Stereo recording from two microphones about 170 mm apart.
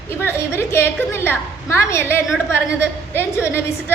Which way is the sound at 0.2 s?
15° left (ahead or behind).